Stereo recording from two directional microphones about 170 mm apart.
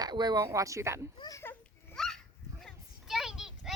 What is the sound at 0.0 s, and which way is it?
Speech, 25° right (ahead or behind).